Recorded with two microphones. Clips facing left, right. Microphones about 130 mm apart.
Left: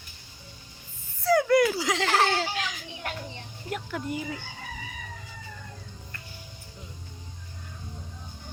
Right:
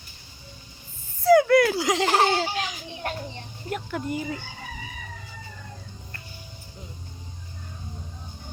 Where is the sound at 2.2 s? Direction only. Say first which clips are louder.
Right 3 dB; 15° right (ahead or behind).